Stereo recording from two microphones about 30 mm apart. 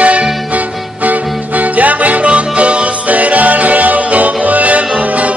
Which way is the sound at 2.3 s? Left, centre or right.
Right.